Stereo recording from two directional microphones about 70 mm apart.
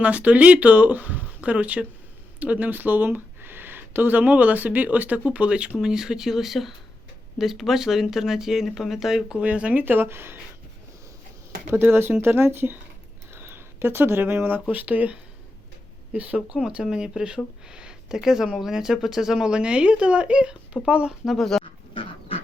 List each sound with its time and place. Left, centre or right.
0.0 s speech: right; by 9.4 s centre
9.4 s speech: centre; by 10.4 s right
11.7 s speech: right; by 21.2 s centre
21.2 s speech: centre